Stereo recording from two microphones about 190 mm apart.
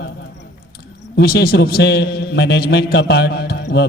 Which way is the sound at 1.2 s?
55° left (ahead or behind).